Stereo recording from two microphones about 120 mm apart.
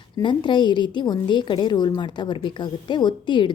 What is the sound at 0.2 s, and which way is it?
A woman's voice, 40° left (ahead or behind).